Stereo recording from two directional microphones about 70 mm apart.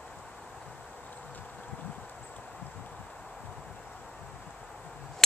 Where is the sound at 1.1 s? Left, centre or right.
Left.